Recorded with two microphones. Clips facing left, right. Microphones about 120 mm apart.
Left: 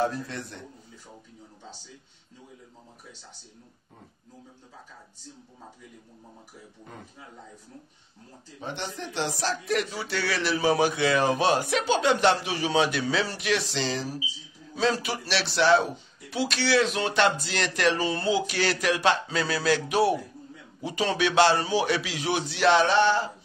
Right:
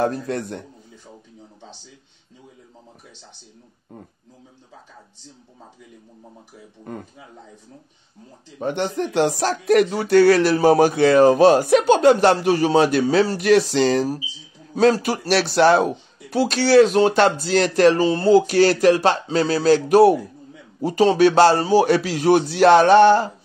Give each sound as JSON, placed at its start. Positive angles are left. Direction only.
{"t": 0.0, "sound": "speech", "side_deg": -50}
{"t": 8.5, "sound": "speech", "side_deg": -55}